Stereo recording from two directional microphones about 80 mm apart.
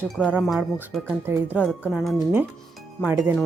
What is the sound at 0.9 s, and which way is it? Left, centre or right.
Speech, centre.